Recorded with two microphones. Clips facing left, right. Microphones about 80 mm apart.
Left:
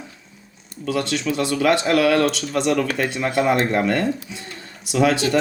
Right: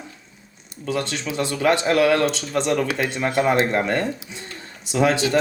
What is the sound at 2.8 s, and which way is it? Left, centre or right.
Speech, left.